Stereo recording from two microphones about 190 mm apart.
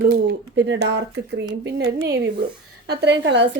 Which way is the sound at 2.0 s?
55° right (ahead or behind).